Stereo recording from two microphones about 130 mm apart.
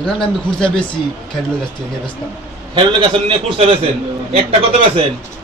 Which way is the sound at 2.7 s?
40° right (ahead or behind).